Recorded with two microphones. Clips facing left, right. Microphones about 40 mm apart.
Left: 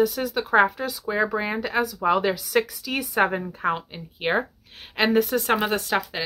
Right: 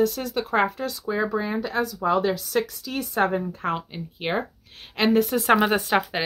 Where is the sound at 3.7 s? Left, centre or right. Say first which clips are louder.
Left 2 dB; centre.